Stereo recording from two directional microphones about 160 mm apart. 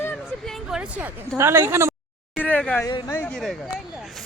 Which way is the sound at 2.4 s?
10° left (ahead or behind).